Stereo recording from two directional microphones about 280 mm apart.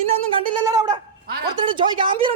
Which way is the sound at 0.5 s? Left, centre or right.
Centre.